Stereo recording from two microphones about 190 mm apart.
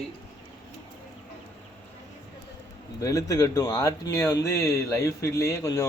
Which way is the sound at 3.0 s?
15° left (ahead or behind).